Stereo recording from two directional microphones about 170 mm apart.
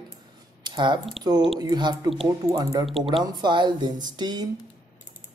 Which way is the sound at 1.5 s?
25° right (ahead or behind).